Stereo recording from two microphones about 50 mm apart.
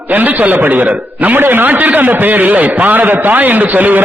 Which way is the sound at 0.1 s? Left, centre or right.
Right.